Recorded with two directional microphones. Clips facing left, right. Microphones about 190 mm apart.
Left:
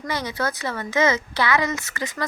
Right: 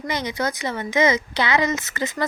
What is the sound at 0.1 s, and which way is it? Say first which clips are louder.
Speech: right 1 dB; 15° right (ahead or behind).